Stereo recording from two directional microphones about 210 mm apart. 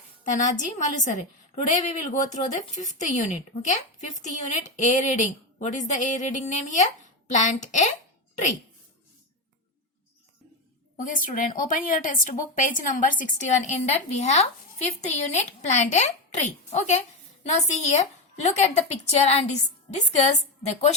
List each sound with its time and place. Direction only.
0.3 s a woman's voice: 35° left (ahead or behind)
10.9 s a woman's voice: 40° left (ahead or behind)